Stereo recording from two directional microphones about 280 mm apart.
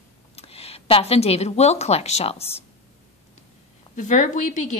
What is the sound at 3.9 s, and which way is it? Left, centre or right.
Speech, left.